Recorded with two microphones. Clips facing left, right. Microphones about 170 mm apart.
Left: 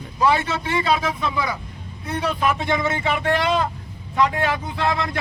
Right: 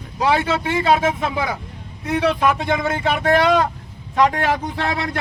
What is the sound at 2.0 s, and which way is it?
Speech, 80° right.